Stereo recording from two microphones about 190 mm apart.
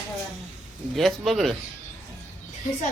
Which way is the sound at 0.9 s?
Centre (ahead or behind).